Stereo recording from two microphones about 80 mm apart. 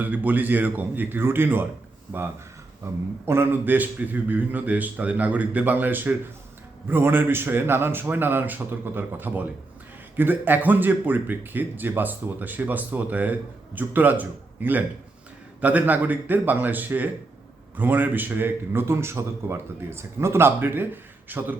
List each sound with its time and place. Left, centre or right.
0.0 s a man's voice: right
2.8 s a man's voice: right